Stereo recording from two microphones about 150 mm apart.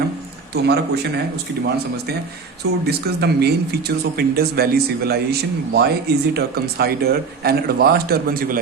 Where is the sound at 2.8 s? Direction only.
90° right.